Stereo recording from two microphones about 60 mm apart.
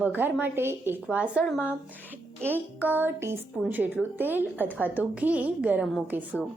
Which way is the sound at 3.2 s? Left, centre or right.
Right.